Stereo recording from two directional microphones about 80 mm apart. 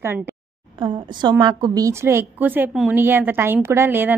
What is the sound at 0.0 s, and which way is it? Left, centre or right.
Speech, right.